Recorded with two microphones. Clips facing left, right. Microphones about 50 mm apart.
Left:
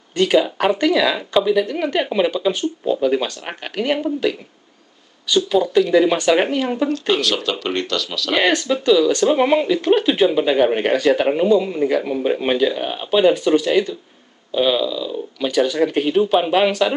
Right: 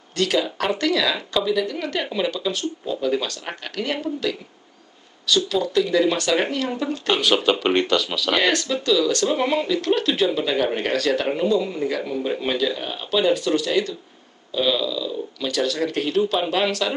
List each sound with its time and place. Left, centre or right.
0.1 s speech: centre
7.2 s speech: centre
8.3 s speech: centre